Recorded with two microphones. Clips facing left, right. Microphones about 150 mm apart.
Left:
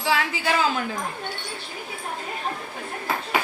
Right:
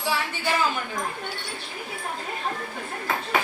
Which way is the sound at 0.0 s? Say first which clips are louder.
Left 3 dB; 90° left.